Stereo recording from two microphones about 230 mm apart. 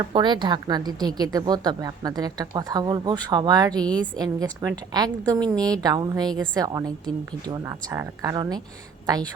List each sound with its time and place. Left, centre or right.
0.0 s a woman's voice: centre
7.9 s a woman's voice: centre